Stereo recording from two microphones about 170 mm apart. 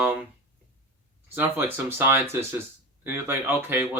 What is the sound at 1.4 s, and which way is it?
Speech, 10° right (ahead or behind).